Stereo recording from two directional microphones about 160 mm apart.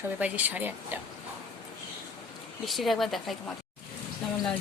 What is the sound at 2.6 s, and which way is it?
Speech, centre (ahead or behind).